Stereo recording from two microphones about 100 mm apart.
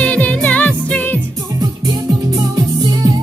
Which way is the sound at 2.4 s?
45° right (ahead or behind).